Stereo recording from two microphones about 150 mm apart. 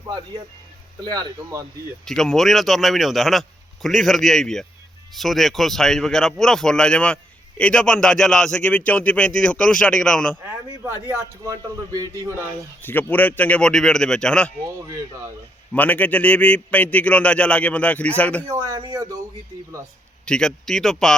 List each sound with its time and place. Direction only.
1.0 s speech: 25° right (ahead or behind)
2.0 s a man's voice: 5° left (ahead or behind)
10.8 s speech: 15° right (ahead or behind)
12.8 s a man's voice: 15° left (ahead or behind)
15.7 s a man's voice: 10° left (ahead or behind)
18.4 s speech: 20° right (ahead or behind)
20.2 s a man's voice: 5° left (ahead or behind)